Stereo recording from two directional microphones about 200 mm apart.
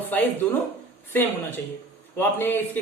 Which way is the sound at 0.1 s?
10° left (ahead or behind).